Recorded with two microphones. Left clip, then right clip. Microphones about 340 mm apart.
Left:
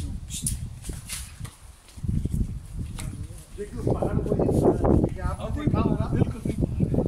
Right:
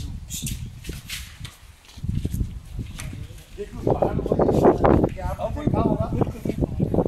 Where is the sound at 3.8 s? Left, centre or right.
Right.